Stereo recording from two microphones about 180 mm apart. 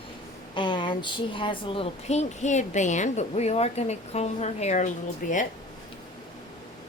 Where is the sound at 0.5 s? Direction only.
25° left (ahead or behind).